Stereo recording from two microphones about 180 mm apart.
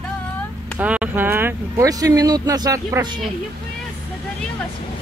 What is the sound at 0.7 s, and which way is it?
Speech, 10° right (ahead or behind).